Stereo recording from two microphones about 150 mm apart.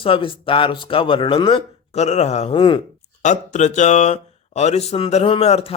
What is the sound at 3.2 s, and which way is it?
Speech, 55° left (ahead or behind).